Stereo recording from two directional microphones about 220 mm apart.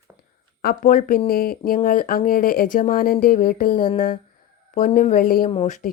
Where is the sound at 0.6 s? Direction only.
40° left (ahead or behind).